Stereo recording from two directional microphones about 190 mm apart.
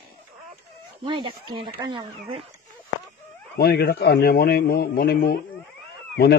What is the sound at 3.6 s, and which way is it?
A man's voice, 55° left (ahead or behind).